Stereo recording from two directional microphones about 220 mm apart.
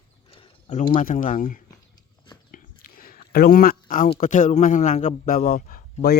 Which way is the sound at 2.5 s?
40° left (ahead or behind).